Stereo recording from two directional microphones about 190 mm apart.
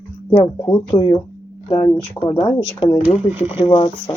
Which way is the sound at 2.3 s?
25° left (ahead or behind).